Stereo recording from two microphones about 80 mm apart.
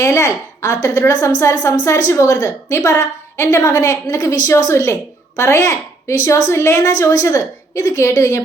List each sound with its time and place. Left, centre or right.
0.0 s a woman's voice: left